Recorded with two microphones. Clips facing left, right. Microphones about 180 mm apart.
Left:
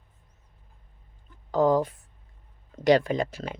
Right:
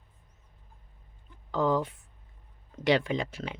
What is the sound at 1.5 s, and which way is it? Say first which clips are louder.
A woman's voice: left 5 dB; 40° left (ahead or behind).